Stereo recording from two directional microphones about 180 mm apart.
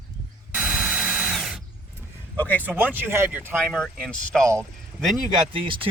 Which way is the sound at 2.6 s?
10° right (ahead or behind).